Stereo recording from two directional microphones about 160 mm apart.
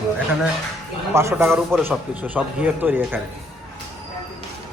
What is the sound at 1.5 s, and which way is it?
Speech, centre (ahead or behind).